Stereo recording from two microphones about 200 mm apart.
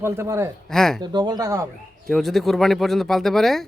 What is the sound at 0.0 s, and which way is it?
Speech, 15° right (ahead or behind).